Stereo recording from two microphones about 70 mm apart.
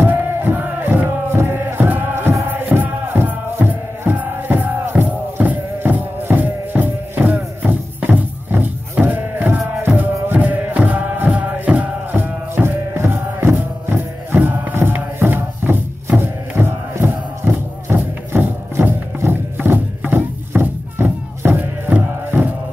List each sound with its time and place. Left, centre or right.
0.0 s music: right